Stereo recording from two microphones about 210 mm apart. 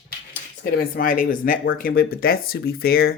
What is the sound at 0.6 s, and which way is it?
Speech, 40° left (ahead or behind).